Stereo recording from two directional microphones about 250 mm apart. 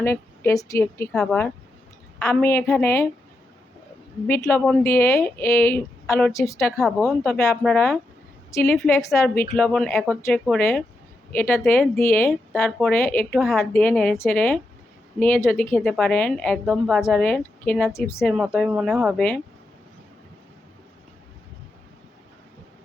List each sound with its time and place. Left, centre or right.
0.0 s a woman's voice: centre
4.3 s a woman's voice: centre
6.7 s a woman's voice: centre
9.0 s a woman's voice: centre
9.3 s speech: left
9.6 s a woman's voice: centre
18.3 s a woman's voice: centre